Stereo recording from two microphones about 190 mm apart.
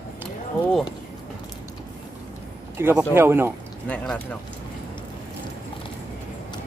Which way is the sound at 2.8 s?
10° right (ahead or behind).